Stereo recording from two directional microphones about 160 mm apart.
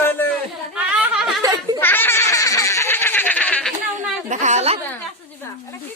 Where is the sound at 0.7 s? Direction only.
5° right (ahead or behind).